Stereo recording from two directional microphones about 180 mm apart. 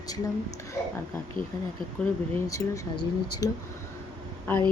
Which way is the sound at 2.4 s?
20° left (ahead or behind).